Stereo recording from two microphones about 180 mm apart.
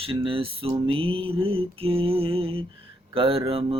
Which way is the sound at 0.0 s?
30° right (ahead or behind).